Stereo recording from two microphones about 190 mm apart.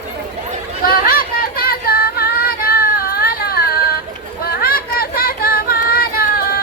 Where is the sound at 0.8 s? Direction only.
50° left (ahead or behind).